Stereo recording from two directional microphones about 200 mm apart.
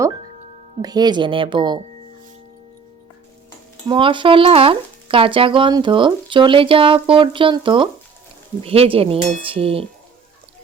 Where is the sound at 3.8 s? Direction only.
25° right (ahead or behind).